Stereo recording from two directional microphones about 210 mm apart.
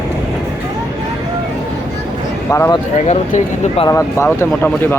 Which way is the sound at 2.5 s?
15° left (ahead or behind).